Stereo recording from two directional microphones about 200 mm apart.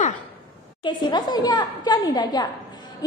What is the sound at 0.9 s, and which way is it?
A woman's voice, 20° left (ahead or behind).